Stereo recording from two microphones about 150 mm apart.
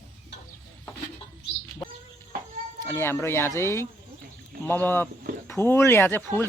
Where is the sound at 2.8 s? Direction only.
15° left (ahead or behind).